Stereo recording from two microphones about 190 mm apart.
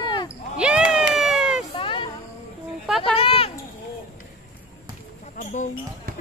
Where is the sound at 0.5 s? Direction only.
5° right (ahead or behind).